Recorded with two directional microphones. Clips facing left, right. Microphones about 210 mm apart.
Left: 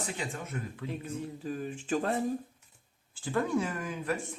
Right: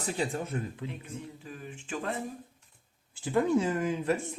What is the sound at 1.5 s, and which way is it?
Speech, 40° left (ahead or behind).